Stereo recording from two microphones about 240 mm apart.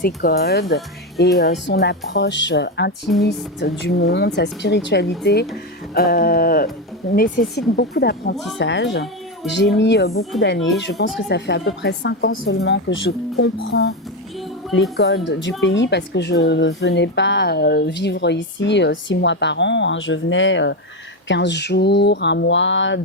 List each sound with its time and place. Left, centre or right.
0.0 s speech: left